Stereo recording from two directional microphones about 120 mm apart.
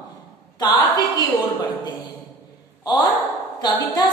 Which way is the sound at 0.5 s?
35° left (ahead or behind).